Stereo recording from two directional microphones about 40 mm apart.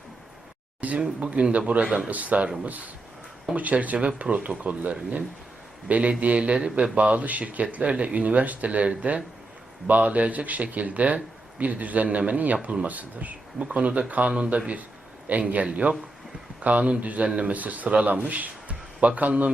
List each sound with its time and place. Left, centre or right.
0.8 s a man's voice: right